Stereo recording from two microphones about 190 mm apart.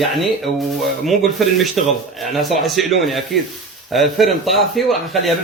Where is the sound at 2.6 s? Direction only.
Centre (ahead or behind).